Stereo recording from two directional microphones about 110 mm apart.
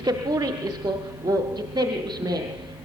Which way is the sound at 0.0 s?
35° right (ahead or behind).